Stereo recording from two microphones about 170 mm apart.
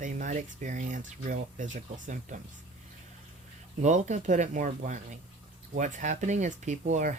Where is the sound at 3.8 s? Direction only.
45° right (ahead or behind).